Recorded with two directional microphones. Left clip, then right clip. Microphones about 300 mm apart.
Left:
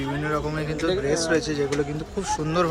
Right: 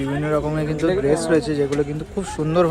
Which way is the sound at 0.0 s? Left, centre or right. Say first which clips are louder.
Right 5 dB; centre.